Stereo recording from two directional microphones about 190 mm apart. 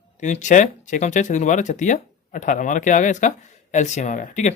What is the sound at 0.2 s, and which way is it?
Speech, 40° left (ahead or behind).